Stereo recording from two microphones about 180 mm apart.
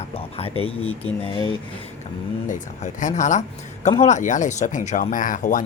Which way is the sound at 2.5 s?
45° left (ahead or behind).